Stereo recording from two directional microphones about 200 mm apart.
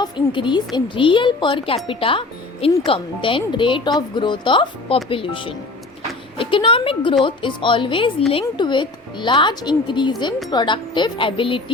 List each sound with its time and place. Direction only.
0.0 s speech: 25° left (ahead or behind)